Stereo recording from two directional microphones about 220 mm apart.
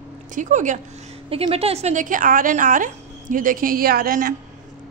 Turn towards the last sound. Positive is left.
turn(degrees=-40)  # may be behind; listen again after turning